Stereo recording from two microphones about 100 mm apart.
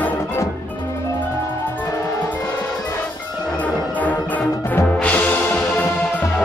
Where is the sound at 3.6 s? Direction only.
15° left (ahead or behind).